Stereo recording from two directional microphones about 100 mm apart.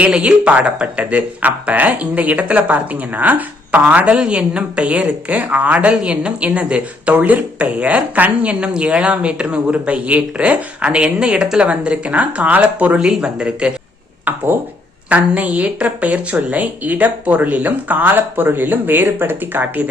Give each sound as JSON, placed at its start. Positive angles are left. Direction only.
{"t": 0.0, "sound": "speech", "side_deg": -10}